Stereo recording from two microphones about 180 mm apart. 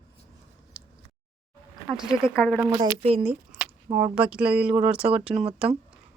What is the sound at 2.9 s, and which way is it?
Speech, 35° right (ahead or behind).